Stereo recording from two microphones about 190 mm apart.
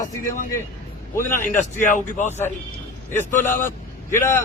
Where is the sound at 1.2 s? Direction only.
15° left (ahead or behind).